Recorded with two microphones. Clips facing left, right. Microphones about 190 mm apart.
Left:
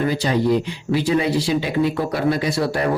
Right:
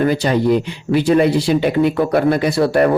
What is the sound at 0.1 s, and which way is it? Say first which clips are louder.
Speech: right 3 dB; 60° right (ahead or behind).